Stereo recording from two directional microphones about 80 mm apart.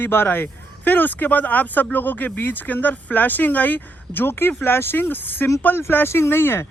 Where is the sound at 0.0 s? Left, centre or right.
Left.